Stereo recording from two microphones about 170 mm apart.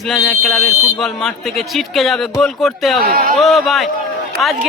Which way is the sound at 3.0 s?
60° right (ahead or behind).